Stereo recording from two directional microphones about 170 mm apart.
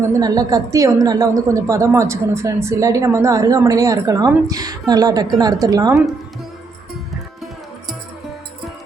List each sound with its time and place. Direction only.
0.1 s a woman's voice: 20° right (ahead or behind)